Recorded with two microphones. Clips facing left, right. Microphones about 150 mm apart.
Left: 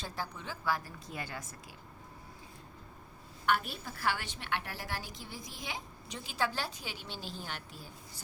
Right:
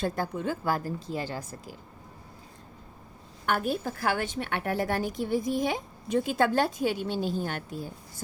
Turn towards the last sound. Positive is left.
turn(degrees=-50)  # may be behind; listen again after turning